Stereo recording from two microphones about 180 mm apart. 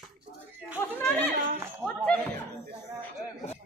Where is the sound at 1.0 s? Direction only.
10° left (ahead or behind).